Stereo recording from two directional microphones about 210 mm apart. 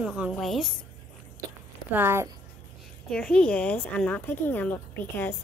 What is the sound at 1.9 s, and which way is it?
Speech, 10° right (ahead or behind).